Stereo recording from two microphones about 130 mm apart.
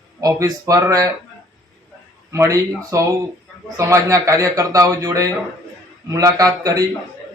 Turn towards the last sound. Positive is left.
turn(degrees=-25)  # may be behind; listen again after turning